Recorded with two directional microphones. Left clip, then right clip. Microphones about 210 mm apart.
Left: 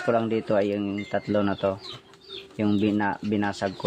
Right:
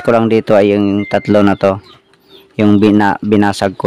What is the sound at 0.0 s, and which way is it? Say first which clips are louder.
Speech: right 13 dB; 55° right (ahead or behind).